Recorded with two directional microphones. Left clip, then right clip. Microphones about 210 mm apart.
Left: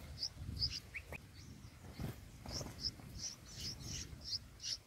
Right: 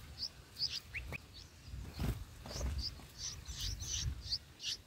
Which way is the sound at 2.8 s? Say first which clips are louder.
Left 1 dB; 15° right (ahead or behind).